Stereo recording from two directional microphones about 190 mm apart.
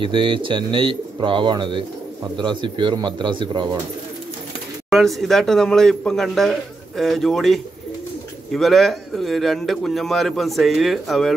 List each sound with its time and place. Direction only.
0.0 s speech: 25° right (ahead or behind)
4.8 s a man's voice: centre (ahead or behind)